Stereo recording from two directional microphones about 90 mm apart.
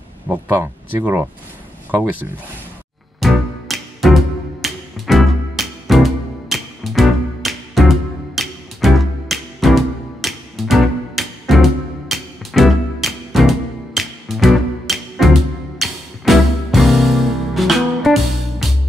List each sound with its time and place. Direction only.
0.3 s speech: 20° right (ahead or behind)
3.2 s music: centre (ahead or behind)